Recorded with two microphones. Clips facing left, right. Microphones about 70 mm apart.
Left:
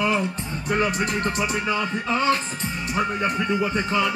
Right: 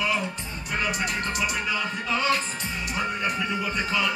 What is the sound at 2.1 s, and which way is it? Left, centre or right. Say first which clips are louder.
Speech: left 3 dB; left.